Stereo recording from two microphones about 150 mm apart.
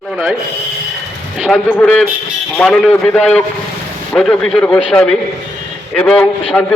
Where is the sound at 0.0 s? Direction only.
5° right (ahead or behind).